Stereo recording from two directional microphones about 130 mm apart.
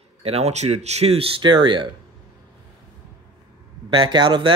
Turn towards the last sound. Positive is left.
turn(degrees=-35)  # may be behind; listen again after turning